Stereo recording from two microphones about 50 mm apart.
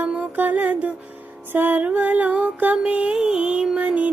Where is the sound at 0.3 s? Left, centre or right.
Right.